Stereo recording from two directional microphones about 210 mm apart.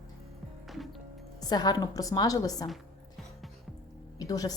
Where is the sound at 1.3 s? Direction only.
20° left (ahead or behind).